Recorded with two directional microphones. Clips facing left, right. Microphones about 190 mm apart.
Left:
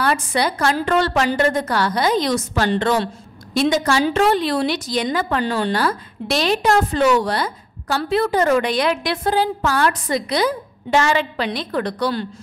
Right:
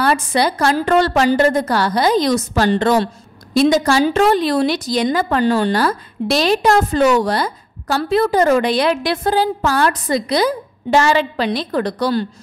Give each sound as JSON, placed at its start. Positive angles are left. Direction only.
{"t": 0.0, "sound": "a woman's voice", "side_deg": -35}